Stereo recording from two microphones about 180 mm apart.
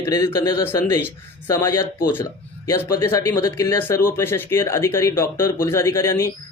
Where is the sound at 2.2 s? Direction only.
15° left (ahead or behind).